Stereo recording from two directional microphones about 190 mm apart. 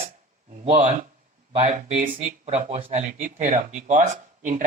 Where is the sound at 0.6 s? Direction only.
35° right (ahead or behind).